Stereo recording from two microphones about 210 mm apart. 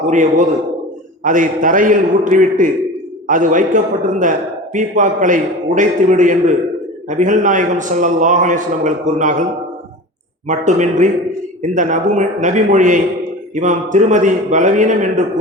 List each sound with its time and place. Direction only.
0.1 s a man's voice: 35° right (ahead or behind)
10.5 s a man's voice: 35° right (ahead or behind)